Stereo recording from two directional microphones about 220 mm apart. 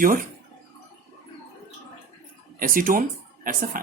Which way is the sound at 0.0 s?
40° right (ahead or behind).